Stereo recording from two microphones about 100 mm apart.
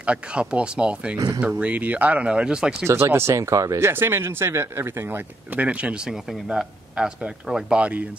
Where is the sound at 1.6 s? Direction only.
15° right (ahead or behind).